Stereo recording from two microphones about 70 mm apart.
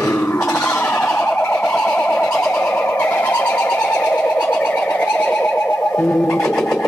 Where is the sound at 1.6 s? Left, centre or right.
Centre.